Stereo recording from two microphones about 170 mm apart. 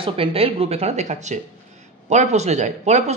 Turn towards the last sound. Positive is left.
turn(degrees=-45)  # may be behind; listen again after turning